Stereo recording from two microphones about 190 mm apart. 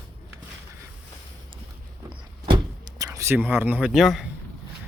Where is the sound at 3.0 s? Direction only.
15° right (ahead or behind); by 4.3 s centre (ahead or behind).